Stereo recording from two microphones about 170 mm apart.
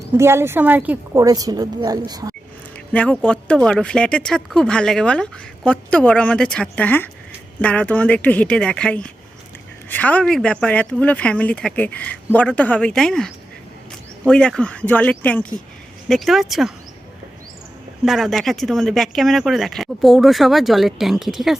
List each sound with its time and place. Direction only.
0.2 s a woman's voice: 15° right (ahead or behind)
1.2 s a woman's voice: 20° right (ahead or behind)
2.9 s speech: 5° left (ahead or behind)
18.0 s speech: centre (ahead or behind)